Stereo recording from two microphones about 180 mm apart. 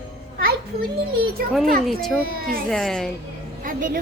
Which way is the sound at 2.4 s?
55° right (ahead or behind).